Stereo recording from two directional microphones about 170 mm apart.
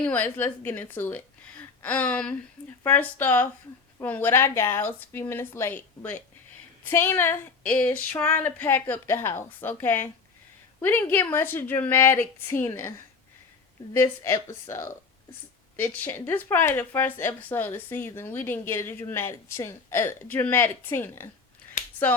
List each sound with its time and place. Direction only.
0.0 s a woman's voice: 10° left (ahead or behind)
13.9 s a woman's voice: 15° left (ahead or behind)